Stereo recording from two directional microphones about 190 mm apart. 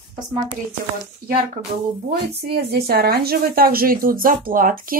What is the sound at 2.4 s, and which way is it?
A woman's voice, 55° right (ahead or behind).